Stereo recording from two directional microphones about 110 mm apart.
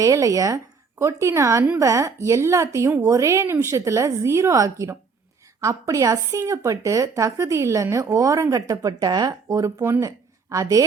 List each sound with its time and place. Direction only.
0.0 s speech: 30° right (ahead or behind)